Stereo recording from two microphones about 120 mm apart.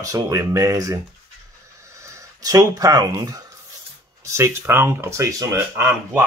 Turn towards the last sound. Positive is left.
turn(degrees=-20)  # may be behind; listen again after turning